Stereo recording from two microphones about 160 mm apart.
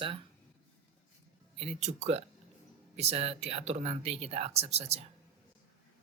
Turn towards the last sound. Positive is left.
turn(degrees=-40)  # may be behind; listen again after turning